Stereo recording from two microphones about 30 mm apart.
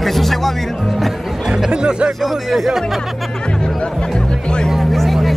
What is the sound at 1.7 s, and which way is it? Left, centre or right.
Music, right.